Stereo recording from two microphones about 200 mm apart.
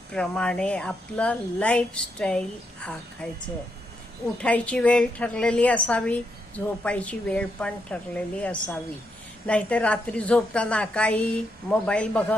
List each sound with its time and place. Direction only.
0.1 s a woman's voice: 5° left (ahead or behind)
4.4 s a woman's voice: 5° left (ahead or behind)